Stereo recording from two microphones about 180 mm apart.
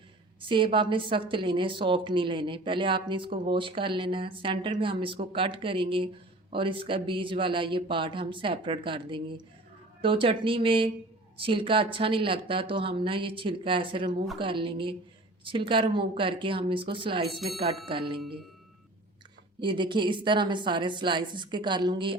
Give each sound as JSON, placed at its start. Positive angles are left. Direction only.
{"t": 0.4, "sound": "a woman's voice", "side_deg": -30}
{"t": 17.2, "sound": "speech", "side_deg": 0}
{"t": 19.5, "sound": "a woman's voice", "side_deg": -25}